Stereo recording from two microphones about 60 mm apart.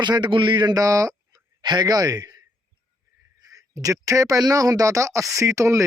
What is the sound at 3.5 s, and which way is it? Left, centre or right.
A man's voice, right.